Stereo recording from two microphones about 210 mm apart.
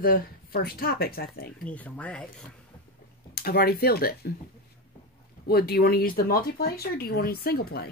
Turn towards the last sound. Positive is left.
turn(degrees=50)  # may be behind; listen again after turning